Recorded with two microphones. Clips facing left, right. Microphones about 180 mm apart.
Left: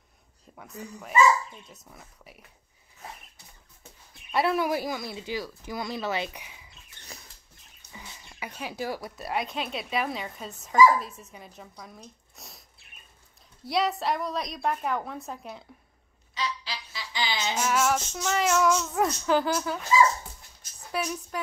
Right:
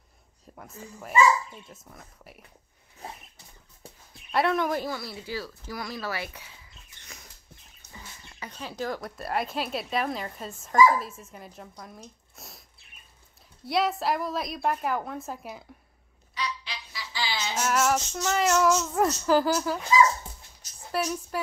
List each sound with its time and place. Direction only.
0.6 s speech: centre (ahead or behind)
3.0 s a sound: 30° right (ahead or behind)
4.3 s speech: 5° left (ahead or behind)
8.0 s speech: 10° left (ahead or behind)
13.7 s speech: centre (ahead or behind)
16.3 s a sound: 25° left (ahead or behind)
17.6 s speech: centre (ahead or behind)
20.9 s speech: centre (ahead or behind)